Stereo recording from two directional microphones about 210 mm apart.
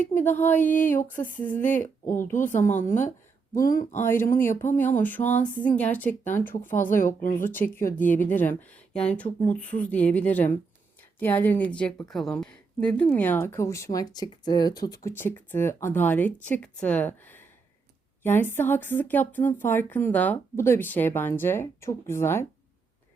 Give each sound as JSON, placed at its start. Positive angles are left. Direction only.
{"t": 0.1, "sound": "a woman's voice", "side_deg": 10}
{"t": 3.5, "sound": "speech", "side_deg": 40}
{"t": 4.0, "sound": "a woman's voice", "side_deg": 10}
{"t": 7.0, "sound": "speech", "side_deg": 40}
{"t": 7.3, "sound": "a woman's voice", "side_deg": 10}